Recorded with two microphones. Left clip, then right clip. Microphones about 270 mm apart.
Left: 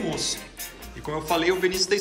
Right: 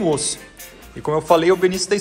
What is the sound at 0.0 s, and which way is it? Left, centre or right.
Speech, centre.